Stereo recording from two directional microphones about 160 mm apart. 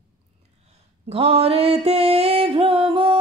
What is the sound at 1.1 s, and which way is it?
Music, 35° right (ahead or behind).